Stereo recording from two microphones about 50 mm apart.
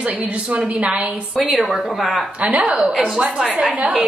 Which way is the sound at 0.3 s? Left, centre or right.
Right.